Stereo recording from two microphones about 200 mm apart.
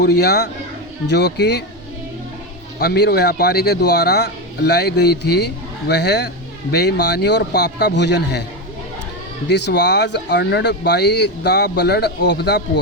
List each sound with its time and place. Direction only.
0.0 s speech: 55° left (ahead or behind)
2.7 s speech: 55° left (ahead or behind)
9.5 s speech: 55° left (ahead or behind)